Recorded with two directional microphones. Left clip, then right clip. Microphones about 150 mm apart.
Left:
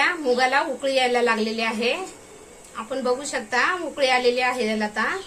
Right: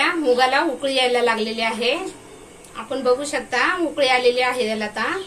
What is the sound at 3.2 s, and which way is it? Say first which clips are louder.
A woman's voice: right 2 dB; 40° left (ahead or behind).